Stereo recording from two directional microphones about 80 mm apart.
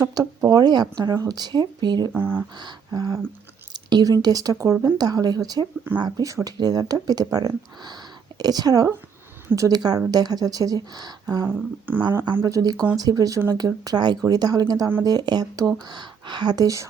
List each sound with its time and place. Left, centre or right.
0.0 s speech: right
2.1 s speech: right
2.6 s speech: right
3.7 s speech: right
4.9 s speech: right
6.2 s speech: right
11.4 s speech: right
12.5 s speech: right